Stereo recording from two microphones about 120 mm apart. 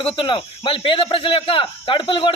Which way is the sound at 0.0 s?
45° left (ahead or behind).